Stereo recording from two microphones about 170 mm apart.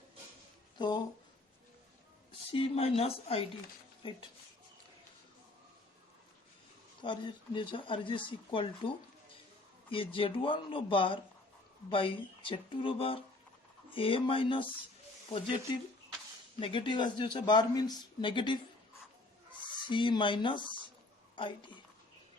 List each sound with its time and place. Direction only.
0.8 s a man's voice: 25° left (ahead or behind)
2.5 s speech: 35° left (ahead or behind)
7.0 s a man's voice: 30° left (ahead or behind)
9.9 s a man's voice: 30° left (ahead or behind)
19.9 s a man's voice: 30° left (ahead or behind)